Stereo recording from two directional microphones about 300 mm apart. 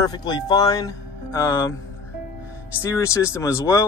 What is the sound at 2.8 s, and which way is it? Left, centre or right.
Speech, centre.